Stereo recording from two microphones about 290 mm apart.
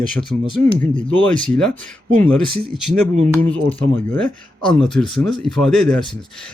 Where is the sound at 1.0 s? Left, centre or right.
Centre.